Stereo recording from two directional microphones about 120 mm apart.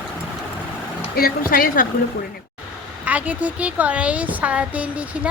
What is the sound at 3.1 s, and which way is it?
A woman's voice, 15° right (ahead or behind).